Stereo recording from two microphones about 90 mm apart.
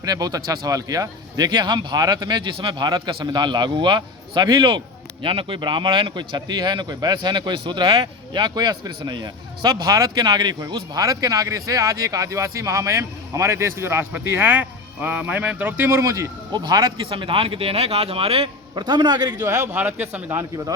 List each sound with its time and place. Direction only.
0.0 s a man's voice: 45° right (ahead or behind)
5.2 s a man's voice: 75° right (ahead or behind); by 15.9 s 20° right (ahead or behind)
15.9 s speech: 35° right (ahead or behind)
16.5 s a man's voice: 50° right (ahead or behind)
17.1 s speech: 75° right (ahead or behind)
18.7 s a man's voice: 55° right (ahead or behind)
19.7 s speech: 20° right (ahead or behind)